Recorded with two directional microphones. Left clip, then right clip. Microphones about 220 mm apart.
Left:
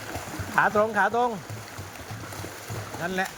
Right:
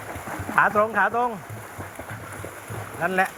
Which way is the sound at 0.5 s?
20° left (ahead or behind).